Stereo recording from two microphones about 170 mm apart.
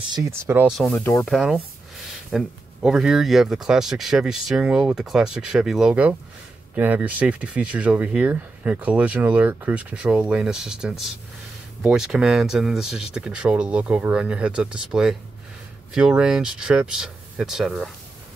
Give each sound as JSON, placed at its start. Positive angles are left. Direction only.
{"t": 0.1, "sound": "speech", "side_deg": -15}
{"t": 0.7, "sound": "speech", "side_deg": 0}
{"t": 0.9, "sound": "speech", "side_deg": 15}
{"t": 1.2, "sound": "speech", "side_deg": 0}